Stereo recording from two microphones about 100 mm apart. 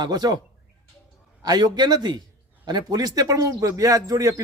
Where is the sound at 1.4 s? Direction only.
45° right (ahead or behind).